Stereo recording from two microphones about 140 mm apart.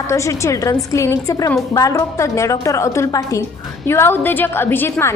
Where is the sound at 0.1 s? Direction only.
20° left (ahead or behind).